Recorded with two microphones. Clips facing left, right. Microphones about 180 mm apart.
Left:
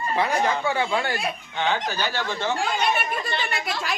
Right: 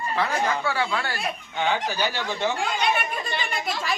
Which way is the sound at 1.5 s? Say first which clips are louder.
Right 1 dB; 15° right (ahead or behind).